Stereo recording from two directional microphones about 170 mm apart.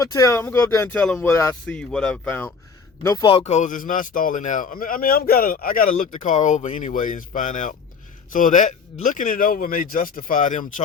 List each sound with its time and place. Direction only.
0.0 s speech: 20° left (ahead or behind)
1.7 s speech: 5° left (ahead or behind)
3.2 s a man's voice: 35° left (ahead or behind)